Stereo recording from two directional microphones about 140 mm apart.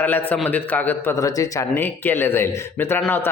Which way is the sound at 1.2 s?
25° left (ahead or behind).